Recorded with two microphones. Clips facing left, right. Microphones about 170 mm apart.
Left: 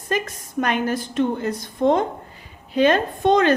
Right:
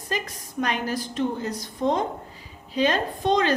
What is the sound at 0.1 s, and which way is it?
A woman's voice, 55° left (ahead or behind).